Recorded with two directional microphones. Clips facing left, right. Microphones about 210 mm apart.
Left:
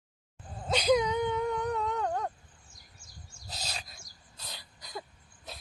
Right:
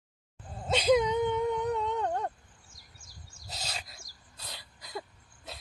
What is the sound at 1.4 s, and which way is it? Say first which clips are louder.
Humming: right 2 dB; 5° right (ahead or behind).